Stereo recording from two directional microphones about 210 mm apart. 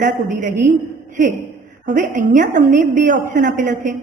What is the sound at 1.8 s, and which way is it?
A woman's voice, 35° right (ahead or behind).